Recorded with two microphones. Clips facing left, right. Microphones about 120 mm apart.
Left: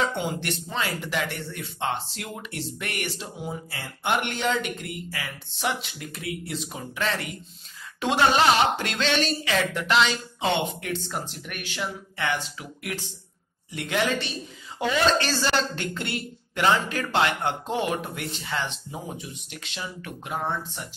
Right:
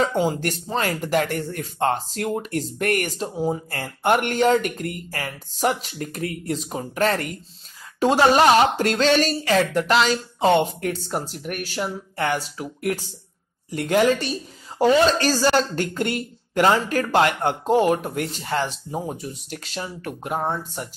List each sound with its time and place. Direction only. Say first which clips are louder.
0.0 s speech: right 6 dB; 40° right (ahead or behind)